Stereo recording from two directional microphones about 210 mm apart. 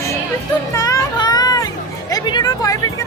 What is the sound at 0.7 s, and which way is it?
Children playing, 15° left (ahead or behind).